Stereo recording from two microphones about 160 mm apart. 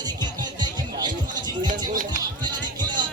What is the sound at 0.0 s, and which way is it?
Music, 25° right (ahead or behind).